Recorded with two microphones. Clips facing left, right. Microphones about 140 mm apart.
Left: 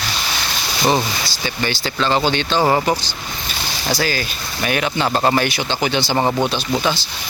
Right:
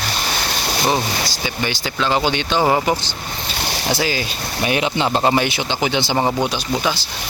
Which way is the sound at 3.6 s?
65° right (ahead or behind).